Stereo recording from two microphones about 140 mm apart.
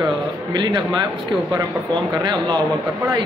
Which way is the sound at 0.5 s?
30° right (ahead or behind).